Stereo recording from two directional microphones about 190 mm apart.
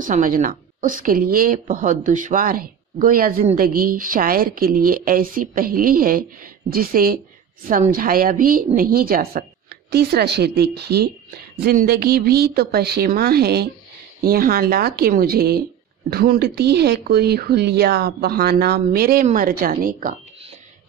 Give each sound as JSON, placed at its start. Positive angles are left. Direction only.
{"t": 0.0, "sound": "a woman's voice", "side_deg": -45}